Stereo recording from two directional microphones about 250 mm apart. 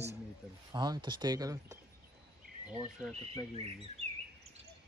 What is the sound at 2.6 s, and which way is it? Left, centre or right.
Speech, centre.